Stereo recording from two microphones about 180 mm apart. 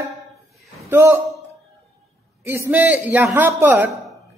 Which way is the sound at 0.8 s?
15° right (ahead or behind).